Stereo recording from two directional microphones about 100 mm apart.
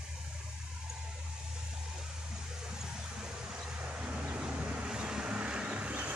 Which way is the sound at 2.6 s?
5° right (ahead or behind).